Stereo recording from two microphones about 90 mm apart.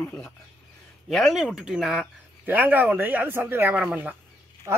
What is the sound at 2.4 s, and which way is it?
A man's voice, 20° right (ahead or behind).